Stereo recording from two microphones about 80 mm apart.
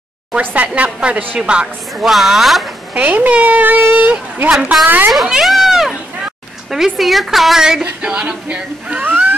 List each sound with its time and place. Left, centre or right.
0.4 s a woman's voice: right
2.0 s a woman's voice: centre
2.9 s a woman's voice: centre
5.1 s a woman's voice: centre